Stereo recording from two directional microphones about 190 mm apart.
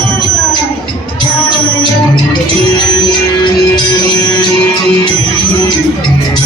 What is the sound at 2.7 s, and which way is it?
Music, 25° left (ahead or behind).